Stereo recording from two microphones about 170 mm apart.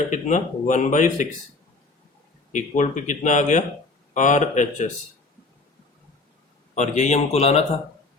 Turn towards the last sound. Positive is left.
turn(degrees=40)  # may be behind; listen again after turning